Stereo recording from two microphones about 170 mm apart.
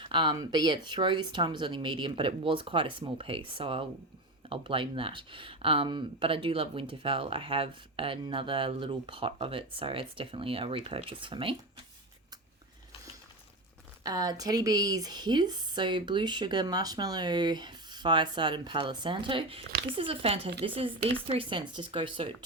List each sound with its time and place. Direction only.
0.0 s a woman's voice: 30° right (ahead or behind)
14.0 s a woman's voice: 20° right (ahead or behind)